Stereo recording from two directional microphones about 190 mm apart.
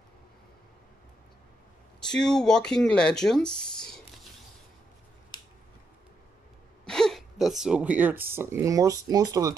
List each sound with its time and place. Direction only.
2.0 s speech: 5° left (ahead or behind)
5.3 s scissors: 20° left (ahead or behind)
6.9 s speech: centre (ahead or behind); by 9.6 s 20° right (ahead or behind)